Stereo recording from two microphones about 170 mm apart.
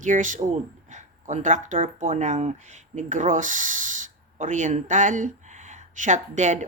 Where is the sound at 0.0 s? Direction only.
50° right (ahead or behind).